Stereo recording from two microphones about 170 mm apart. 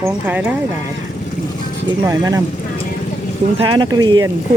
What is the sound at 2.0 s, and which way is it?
Speech, 20° right (ahead or behind).